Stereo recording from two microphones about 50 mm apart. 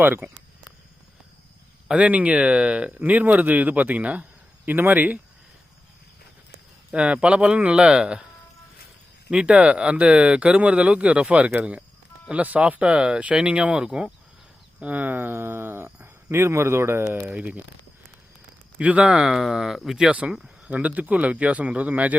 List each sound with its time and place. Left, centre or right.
1.9 s speech: right
6.9 s speech: right
9.3 s speech: centre
14.8 s speech: right
17.2 s speech: right
18.8 s speech: right
19.0 s speech: centre
20.0 s speech: right